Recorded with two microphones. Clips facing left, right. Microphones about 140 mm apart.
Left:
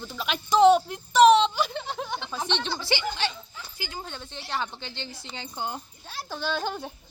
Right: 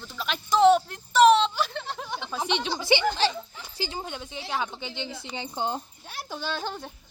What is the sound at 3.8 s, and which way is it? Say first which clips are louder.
Speech: right 5 dB; 30° right (ahead or behind).